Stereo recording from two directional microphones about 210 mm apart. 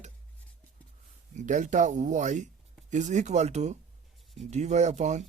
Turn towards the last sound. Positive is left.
turn(degrees=-35)  # may be behind; listen again after turning